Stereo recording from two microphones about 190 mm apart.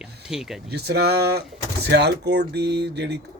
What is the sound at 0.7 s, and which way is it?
Speech, 60° right (ahead or behind).